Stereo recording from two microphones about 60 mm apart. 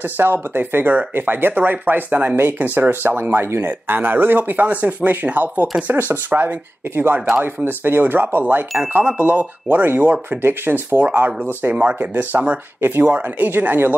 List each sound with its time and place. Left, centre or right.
0.0 s speech: right
7.2 s speech: centre
7.4 s speech: right